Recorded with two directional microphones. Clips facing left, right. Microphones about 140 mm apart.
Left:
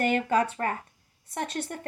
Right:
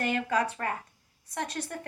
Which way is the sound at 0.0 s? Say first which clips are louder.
Left 4 dB; 25° left (ahead or behind).